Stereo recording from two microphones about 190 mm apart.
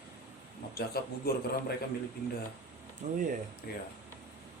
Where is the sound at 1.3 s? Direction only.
55° left (ahead or behind).